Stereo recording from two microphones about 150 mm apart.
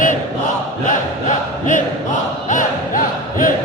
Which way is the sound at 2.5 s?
60° left (ahead or behind).